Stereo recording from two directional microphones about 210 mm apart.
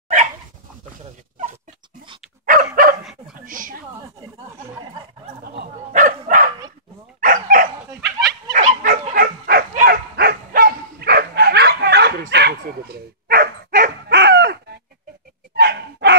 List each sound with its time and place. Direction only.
2.4 s dog: 40° right (ahead or behind)
3.3 s a sound: 40° right (ahead or behind)
5.9 s bow-wow: 35° right (ahead or behind)
7.2 s dog: 40° right (ahead or behind)